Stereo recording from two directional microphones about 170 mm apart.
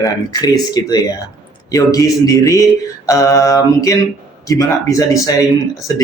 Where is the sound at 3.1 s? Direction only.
20° left (ahead or behind).